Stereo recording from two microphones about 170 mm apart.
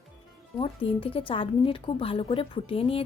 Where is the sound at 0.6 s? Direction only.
30° left (ahead or behind).